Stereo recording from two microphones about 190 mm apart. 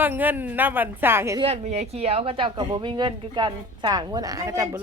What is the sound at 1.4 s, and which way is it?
Speech, 35° right (ahead or behind).